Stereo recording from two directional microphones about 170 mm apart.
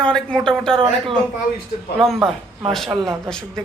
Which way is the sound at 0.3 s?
5° left (ahead or behind).